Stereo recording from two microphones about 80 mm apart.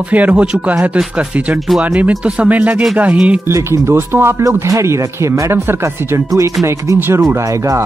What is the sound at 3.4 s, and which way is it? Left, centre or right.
Speech, right.